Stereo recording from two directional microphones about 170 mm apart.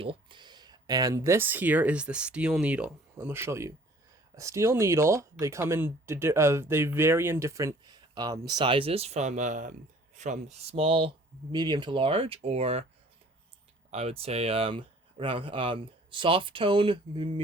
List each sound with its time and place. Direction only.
0.0 s speech: 30° right (ahead or behind)
13.9 s speech: 35° right (ahead or behind)